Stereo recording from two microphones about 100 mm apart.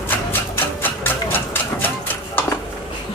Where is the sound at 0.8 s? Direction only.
20° left (ahead or behind).